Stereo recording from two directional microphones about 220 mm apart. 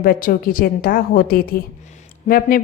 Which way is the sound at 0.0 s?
40° left (ahead or behind).